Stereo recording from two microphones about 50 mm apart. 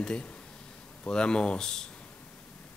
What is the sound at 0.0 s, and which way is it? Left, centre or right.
Speech, centre.